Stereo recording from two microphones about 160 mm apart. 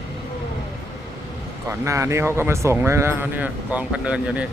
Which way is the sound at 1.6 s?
20° right (ahead or behind).